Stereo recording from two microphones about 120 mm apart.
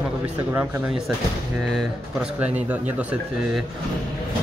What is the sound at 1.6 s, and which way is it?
Speech, centre (ahead or behind).